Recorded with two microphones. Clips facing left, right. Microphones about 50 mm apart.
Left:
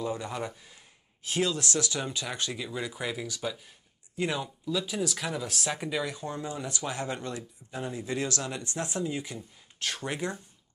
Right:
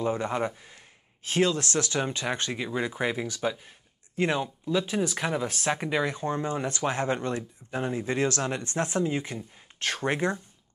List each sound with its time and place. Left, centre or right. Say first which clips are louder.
0.0 s speech: right 5 dB; right